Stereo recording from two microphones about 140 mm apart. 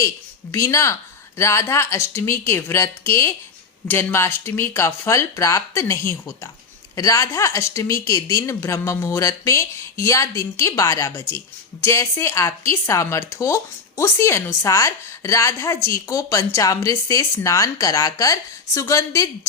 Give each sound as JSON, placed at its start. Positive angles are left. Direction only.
{"t": 0.5, "sound": "speech", "side_deg": 20}